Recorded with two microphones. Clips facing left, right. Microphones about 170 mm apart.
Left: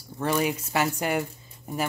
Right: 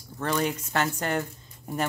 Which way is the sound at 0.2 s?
10° left (ahead or behind).